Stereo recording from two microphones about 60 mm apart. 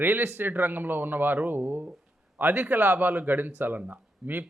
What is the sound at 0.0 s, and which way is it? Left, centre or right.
Speech, right.